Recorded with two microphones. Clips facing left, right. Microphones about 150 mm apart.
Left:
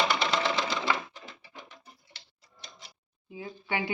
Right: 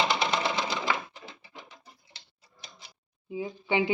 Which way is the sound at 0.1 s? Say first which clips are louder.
Even; 15° right (ahead or behind).